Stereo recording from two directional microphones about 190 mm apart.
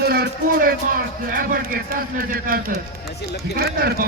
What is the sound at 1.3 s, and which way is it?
Speech, 50° right (ahead or behind).